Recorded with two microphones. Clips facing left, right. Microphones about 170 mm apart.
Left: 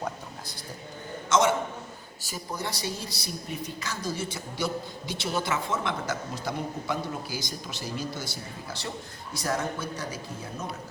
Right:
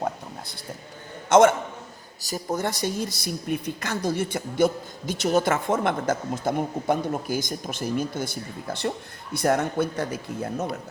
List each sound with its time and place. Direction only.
1.3 s speech: 55° right (ahead or behind)
2.2 s speech: 40° right (ahead or behind)